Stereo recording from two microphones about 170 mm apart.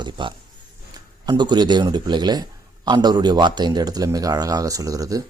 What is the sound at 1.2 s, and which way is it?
A man's voice, 25° right (ahead or behind).